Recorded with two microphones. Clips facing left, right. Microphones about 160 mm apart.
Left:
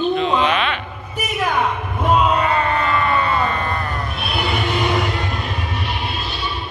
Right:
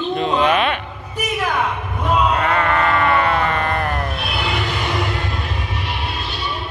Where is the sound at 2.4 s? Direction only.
65° right (ahead or behind).